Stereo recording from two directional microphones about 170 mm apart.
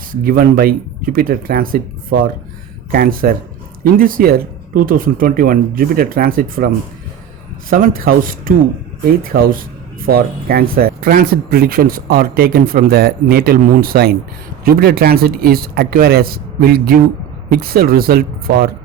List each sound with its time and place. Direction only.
0.1 s speech: 55° right (ahead or behind)
2.9 s speech: 55° right (ahead or behind)
7.7 s speech: 55° right (ahead or behind)